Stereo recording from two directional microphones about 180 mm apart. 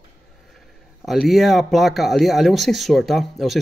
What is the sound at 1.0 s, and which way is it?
A man's voice, centre (ahead or behind).